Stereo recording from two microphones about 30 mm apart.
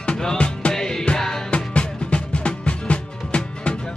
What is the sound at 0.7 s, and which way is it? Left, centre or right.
Music, centre.